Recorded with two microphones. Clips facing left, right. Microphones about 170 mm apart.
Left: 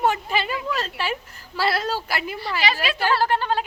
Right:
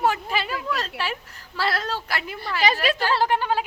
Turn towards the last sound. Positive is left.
turn(degrees=-15)  # may be behind; listen again after turning